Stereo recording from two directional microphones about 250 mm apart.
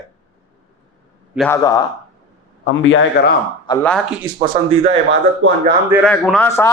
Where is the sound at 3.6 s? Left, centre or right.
Centre.